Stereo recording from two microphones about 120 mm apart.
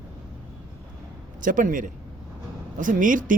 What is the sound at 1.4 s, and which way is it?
Speech, 90° right.